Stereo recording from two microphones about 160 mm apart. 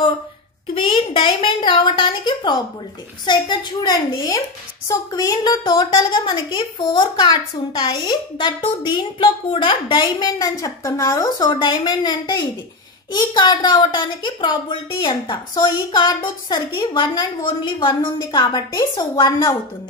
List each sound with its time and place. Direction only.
0.7 s a woman's voice: 35° left (ahead or behind)